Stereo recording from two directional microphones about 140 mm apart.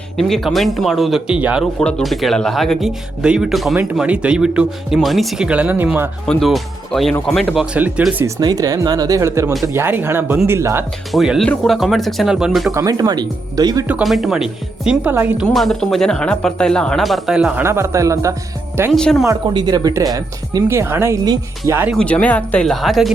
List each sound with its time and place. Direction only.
0.2 s speech: centre (ahead or behind)
1.8 s speech: 5° left (ahead or behind); by 6.1 s 15° right (ahead or behind)
6.2 s speech: centre (ahead or behind)
8.4 s speech: 30° right (ahead or behind)
11.1 s speech: centre (ahead or behind)
12.7 s speech: 25° right (ahead or behind)
13.8 s speech: 5° right (ahead or behind)
17.6 s speech: 20° right (ahead or behind)
21.9 s speech: 10° left (ahead or behind)